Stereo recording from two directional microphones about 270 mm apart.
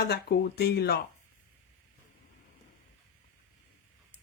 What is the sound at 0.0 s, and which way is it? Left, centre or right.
Speech, left.